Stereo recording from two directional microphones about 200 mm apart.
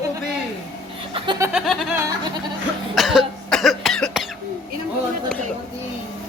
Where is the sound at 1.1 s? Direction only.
20° right (ahead or behind).